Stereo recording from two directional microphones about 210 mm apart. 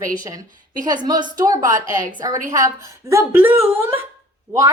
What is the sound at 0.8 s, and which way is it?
A woman's voice, 20° right (ahead or behind).